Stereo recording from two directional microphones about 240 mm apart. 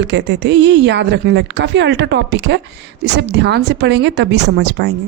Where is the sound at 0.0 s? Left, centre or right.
Right.